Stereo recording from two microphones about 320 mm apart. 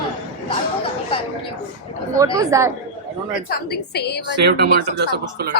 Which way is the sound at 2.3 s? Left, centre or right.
Centre.